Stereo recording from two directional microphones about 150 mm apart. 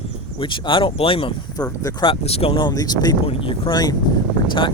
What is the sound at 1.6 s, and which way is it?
Speech, 25° left (ahead or behind).